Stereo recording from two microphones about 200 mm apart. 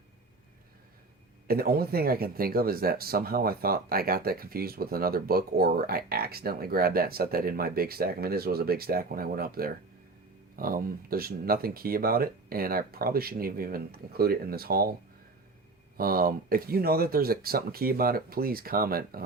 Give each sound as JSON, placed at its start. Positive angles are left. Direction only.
{"t": 1.5, "sound": "speech", "side_deg": -50}
{"t": 16.0, "sound": "speech", "side_deg": -45}